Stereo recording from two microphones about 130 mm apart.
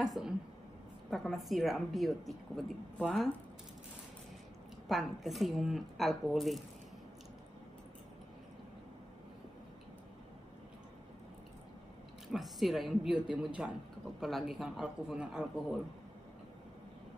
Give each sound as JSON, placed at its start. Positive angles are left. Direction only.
{"t": 0.0, "sound": "a woman's voice", "side_deg": -5}
{"t": 4.8, "sound": "a woman's voice", "side_deg": 0}
{"t": 12.3, "sound": "a woman's voice", "side_deg": 0}